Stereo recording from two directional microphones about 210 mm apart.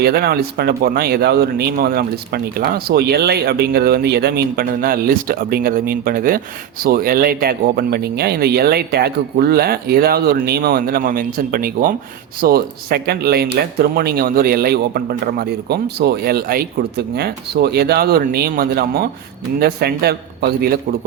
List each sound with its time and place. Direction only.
0.0 s speech: 50° right (ahead or behind)